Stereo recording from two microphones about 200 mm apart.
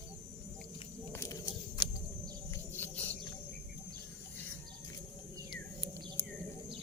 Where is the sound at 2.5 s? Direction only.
10° left (ahead or behind).